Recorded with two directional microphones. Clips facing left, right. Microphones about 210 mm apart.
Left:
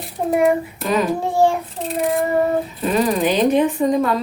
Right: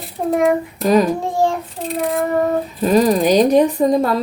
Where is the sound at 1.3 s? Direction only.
10° left (ahead or behind).